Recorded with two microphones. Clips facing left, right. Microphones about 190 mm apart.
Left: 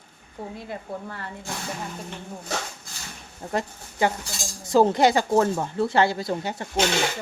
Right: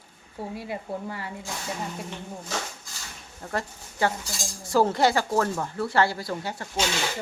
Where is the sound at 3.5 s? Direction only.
20° left (ahead or behind).